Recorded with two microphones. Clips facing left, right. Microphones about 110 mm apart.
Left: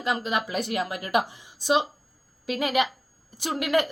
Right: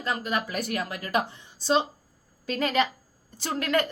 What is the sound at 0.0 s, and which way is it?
Speech, 20° left (ahead or behind).